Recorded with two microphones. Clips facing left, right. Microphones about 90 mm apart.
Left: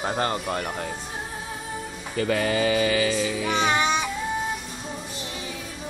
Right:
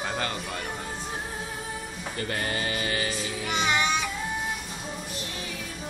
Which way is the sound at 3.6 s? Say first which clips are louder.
Left 2 dB; 30° left (ahead or behind).